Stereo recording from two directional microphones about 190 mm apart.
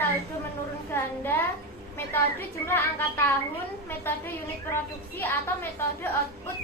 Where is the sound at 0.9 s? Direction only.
10° left (ahead or behind).